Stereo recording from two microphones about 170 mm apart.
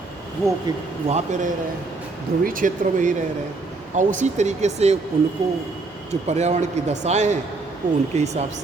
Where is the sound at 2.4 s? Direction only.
50° right (ahead or behind).